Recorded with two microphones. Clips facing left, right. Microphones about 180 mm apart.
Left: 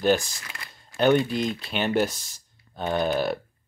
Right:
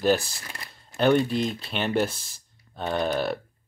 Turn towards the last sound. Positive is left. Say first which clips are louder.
# left 1 dB
turn(degrees=0)  # may be behind; listen again after turning